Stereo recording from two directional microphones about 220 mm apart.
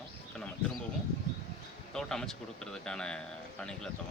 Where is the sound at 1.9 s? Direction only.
Centre (ahead or behind).